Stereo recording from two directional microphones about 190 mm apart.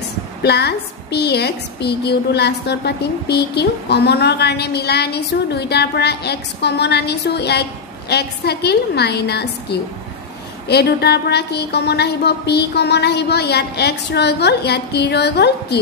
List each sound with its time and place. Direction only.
0.4 s a woman's voice: 60° left (ahead or behind)